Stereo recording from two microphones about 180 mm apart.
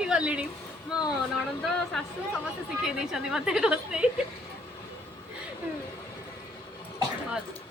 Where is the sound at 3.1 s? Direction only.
5° right (ahead or behind).